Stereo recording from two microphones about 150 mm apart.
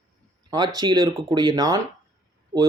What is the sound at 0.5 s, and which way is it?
Speech, 25° right (ahead or behind).